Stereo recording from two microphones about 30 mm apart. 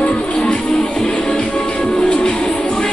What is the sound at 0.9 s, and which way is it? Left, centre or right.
Music, left.